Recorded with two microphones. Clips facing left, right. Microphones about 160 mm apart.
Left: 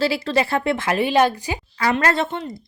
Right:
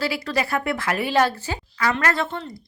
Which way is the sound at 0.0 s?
25° left (ahead or behind).